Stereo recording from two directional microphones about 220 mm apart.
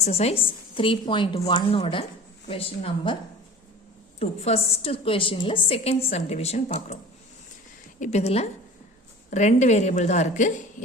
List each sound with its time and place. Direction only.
0.0 s a woman's voice: 30° left (ahead or behind)
4.2 s a woman's voice: 30° left (ahead or behind)